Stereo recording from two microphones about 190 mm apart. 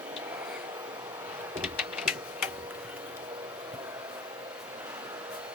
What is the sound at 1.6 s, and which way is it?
Typing, 5° right (ahead or behind).